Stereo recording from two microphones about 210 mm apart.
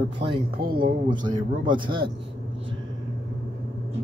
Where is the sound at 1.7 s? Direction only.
20° right (ahead or behind).